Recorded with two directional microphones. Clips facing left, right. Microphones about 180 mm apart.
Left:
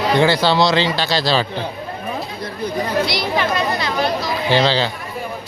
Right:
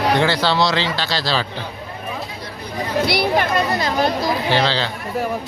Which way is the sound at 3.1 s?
55° right (ahead or behind).